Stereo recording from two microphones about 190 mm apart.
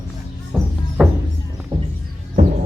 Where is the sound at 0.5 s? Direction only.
Centre (ahead or behind).